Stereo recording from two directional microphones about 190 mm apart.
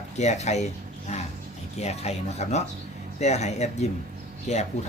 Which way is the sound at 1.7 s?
35° left (ahead or behind).